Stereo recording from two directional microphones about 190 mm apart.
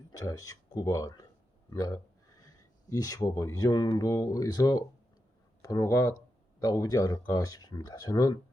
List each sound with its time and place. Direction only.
0.1 s speech: 20° left (ahead or behind)